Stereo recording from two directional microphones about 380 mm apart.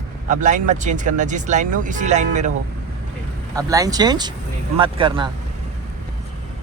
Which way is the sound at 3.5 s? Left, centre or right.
Centre.